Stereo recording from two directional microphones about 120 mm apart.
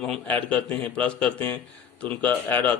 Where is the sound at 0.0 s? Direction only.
10° left (ahead or behind).